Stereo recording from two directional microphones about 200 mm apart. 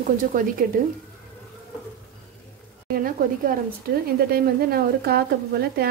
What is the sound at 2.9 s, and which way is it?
Speech, 45° right (ahead or behind).